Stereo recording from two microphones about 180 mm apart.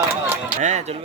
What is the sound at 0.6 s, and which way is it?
Speech, 40° right (ahead or behind).